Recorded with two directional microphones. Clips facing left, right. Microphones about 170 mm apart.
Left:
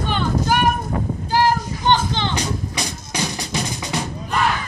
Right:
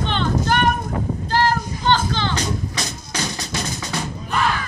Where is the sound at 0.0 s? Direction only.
10° left (ahead or behind).